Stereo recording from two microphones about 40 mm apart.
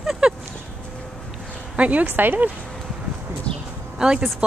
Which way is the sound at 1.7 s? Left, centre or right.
Right.